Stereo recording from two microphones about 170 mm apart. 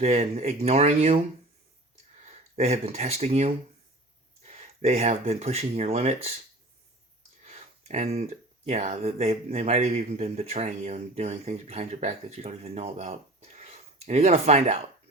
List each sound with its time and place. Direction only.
0.0 s speech: 40° right (ahead or behind)
2.2 s speech: 40° right (ahead or behind)
7.4 s speech: 40° right (ahead or behind)